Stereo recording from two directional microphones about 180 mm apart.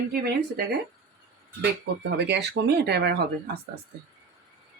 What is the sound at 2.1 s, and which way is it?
Speech, 70° right (ahead or behind).